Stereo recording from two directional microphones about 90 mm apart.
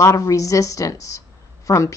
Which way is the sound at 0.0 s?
35° left (ahead or behind).